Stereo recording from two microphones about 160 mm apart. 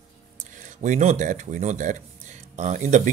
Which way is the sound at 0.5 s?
50° right (ahead or behind).